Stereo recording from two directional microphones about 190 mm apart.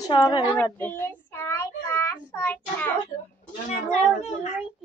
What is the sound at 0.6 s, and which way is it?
Child singing, 10° left (ahead or behind).